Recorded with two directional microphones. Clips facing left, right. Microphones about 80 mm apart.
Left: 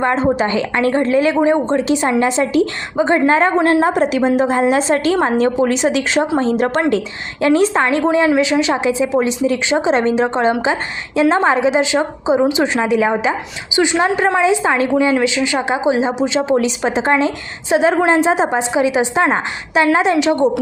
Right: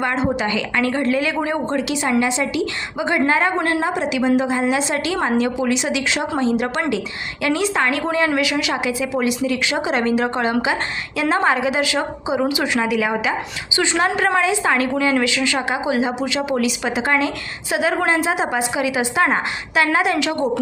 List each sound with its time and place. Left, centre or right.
0.0 s a woman's voice: left
3.8 s a woman's voice: left
14.4 s a woman's voice: left